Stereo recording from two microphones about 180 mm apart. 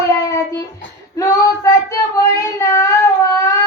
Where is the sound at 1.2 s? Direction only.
20° left (ahead or behind).